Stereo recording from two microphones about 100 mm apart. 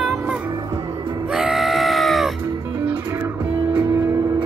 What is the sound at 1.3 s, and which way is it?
Music, 5° right (ahead or behind).